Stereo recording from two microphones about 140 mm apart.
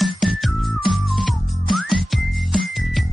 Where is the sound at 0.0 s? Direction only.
Centre (ahead or behind).